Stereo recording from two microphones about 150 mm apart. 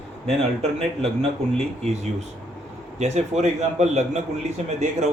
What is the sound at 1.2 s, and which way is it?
Speech, 45° right (ahead or behind).